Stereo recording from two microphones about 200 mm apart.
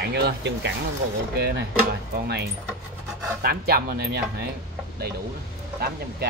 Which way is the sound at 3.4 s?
50° right (ahead or behind).